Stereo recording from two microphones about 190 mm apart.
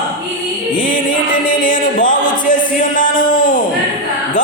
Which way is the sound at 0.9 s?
45° left (ahead or behind).